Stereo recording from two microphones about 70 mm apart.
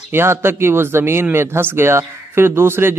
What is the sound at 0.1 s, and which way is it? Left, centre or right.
Speech, right.